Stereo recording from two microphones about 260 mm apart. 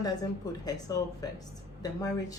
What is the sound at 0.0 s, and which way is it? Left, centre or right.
A woman's voice, centre.